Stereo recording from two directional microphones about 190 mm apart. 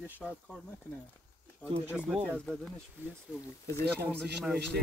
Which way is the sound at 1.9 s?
5° right (ahead or behind).